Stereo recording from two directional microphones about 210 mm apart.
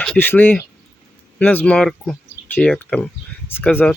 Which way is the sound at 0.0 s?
5° left (ahead or behind).